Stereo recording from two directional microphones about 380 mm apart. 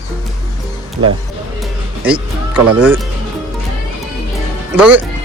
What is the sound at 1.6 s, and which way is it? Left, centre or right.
Music, centre.